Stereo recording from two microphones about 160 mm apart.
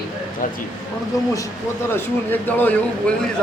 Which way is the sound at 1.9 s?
10° left (ahead or behind).